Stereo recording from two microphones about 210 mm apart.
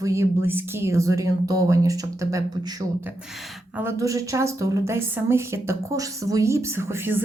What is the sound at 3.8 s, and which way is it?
A woman's voice, 15° right (ahead or behind).